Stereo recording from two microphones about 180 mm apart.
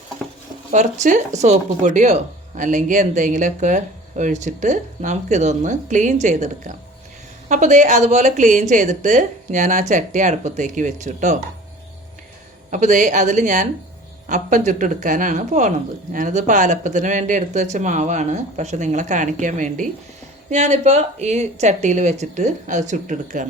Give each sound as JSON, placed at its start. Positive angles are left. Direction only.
{"t": 0.7, "sound": "a woman's voice", "side_deg": -45}
{"t": 12.7, "sound": "a woman's voice", "side_deg": -45}